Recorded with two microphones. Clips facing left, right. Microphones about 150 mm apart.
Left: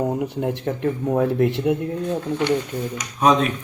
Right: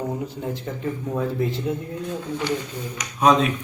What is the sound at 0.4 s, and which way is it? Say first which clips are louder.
Speech: left 5 dB; 65° left (ahead or behind).